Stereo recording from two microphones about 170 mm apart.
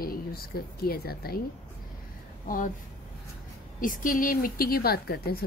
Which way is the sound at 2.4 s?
55° left (ahead or behind).